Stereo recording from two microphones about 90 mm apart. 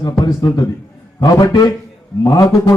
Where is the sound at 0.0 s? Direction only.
40° left (ahead or behind).